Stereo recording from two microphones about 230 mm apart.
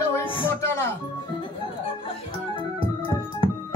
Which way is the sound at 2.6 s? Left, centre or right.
Left.